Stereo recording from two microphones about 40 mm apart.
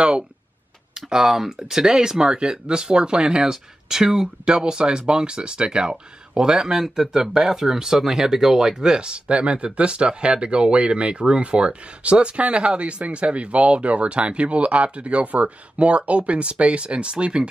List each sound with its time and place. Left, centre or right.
0.9 s speech: centre